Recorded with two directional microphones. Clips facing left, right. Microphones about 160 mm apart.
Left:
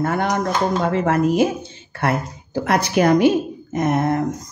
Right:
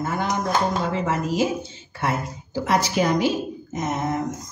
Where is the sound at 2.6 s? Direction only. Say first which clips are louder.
Left 4 dB; 60° left (ahead or behind).